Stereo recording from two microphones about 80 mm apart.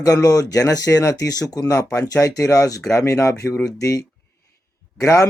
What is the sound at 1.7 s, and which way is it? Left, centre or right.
Speech, left.